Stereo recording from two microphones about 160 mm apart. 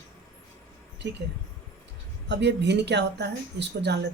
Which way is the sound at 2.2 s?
90° right.